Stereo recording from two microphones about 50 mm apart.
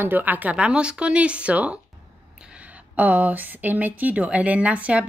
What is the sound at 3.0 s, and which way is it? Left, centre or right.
Speech, right.